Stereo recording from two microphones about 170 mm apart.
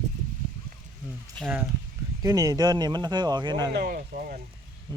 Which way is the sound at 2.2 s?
20° right (ahead or behind).